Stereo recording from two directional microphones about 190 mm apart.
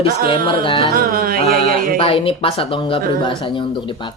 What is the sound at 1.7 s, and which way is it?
Speech, 50° right (ahead or behind).